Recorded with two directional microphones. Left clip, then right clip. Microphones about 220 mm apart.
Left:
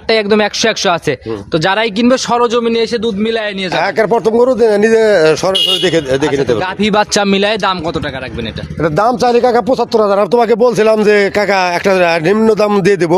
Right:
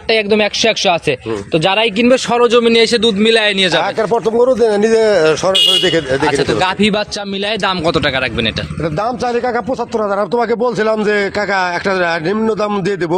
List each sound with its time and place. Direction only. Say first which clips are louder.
0.1 s a man's voice: left 1 dB; 20° left (ahead or behind); by 2.6 s 5° left (ahead or behind)
2.6 s a man's voice: right 3 dB; 20° right (ahead or behind)
4.0 s speech: left 4 dB; 45° left (ahead or behind)
9.0 s speech: left 7 dB; 50° left (ahead or behind)